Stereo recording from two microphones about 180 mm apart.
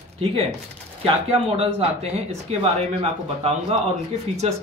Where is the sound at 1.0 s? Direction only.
30° right (ahead or behind).